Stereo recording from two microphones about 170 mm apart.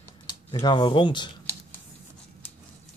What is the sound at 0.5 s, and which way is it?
Speech, 25° left (ahead or behind).